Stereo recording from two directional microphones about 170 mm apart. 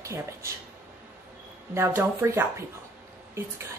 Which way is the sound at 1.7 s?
10° right (ahead or behind).